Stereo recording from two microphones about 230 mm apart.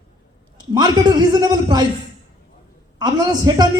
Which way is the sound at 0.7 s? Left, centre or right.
Centre.